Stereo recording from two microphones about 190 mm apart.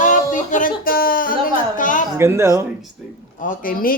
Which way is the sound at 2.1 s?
15° right (ahead or behind).